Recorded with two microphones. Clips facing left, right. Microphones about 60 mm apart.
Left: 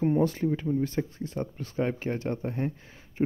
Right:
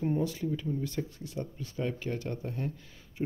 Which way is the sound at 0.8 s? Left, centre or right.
Left.